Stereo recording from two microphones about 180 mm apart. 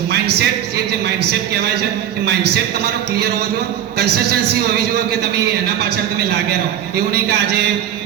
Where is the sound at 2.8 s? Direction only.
65° right (ahead or behind).